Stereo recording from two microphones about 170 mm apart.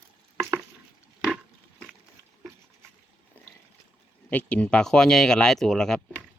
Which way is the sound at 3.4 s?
10° left (ahead or behind).